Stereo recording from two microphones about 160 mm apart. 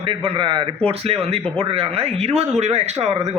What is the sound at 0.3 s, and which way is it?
A man's voice, 30° right (ahead or behind).